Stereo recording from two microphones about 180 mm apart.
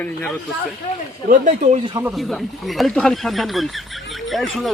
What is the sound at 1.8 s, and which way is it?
Speech, 25° right (ahead or behind).